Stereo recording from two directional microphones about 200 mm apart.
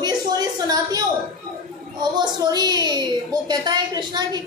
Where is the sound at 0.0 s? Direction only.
20° right (ahead or behind).